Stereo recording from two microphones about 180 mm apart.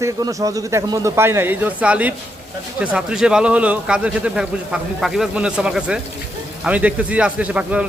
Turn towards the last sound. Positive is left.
turn(degrees=-5)  # may be behind; listen again after turning